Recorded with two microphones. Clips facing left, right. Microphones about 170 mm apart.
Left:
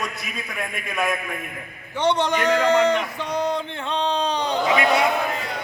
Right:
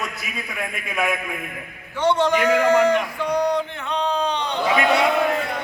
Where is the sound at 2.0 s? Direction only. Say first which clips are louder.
Right 2 dB; 20° left (ahead or behind).